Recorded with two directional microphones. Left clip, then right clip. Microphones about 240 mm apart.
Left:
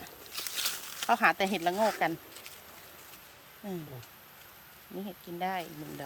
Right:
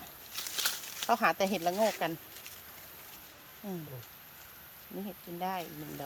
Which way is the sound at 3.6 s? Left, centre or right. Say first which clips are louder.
Left 2 dB; centre.